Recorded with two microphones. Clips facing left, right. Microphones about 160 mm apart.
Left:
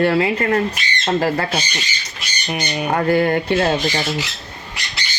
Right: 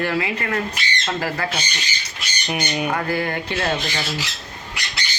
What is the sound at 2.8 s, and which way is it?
Speech, 35° left (ahead or behind).